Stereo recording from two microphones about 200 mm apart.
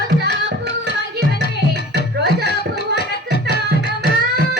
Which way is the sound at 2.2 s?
55° right (ahead or behind).